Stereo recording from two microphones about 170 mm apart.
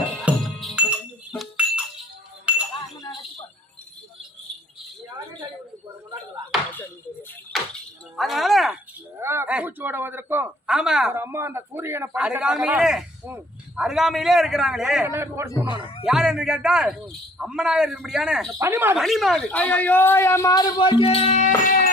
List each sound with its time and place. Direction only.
0.2 s music: centre (ahead or behind)
2.5 s chink: 5° right (ahead or behind)
7.5 s music: centre (ahead or behind)
8.1 s a sound: centre (ahead or behind)
9.1 s a man's voice: 15° right (ahead or behind)
15.0 s a man's voice: 15° right (ahead or behind)
16.0 s speech: 5° right (ahead or behind)
18.6 s a man's voice: 15° right (ahead or behind)
18.9 s a man's voice: centre (ahead or behind); by 21.5 s 40° left (ahead or behind)
21.6 s music: 55° left (ahead or behind)